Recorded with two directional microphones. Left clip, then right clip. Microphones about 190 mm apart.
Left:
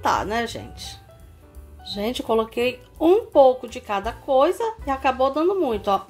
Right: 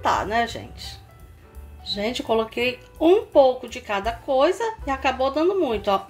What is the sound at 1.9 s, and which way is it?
Speech, 15° left (ahead or behind).